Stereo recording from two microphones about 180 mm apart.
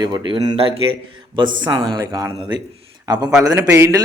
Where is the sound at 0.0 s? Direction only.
25° right (ahead or behind).